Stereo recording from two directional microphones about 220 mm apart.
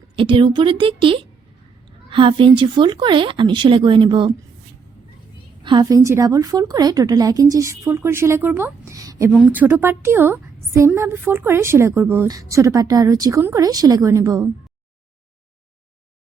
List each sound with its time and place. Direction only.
0.2 s a woman's voice: 20° right (ahead or behind)
5.6 s a woman's voice: 20° right (ahead or behind)
9.3 s a woman's voice: 5° right (ahead or behind)